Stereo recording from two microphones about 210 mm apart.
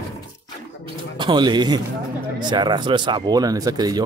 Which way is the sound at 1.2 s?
20° right (ahead or behind).